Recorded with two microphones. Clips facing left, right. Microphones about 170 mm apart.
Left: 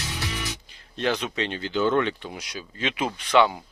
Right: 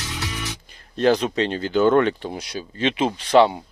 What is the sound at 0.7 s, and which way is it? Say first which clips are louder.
Speech: right 8 dB; 40° right (ahead or behind).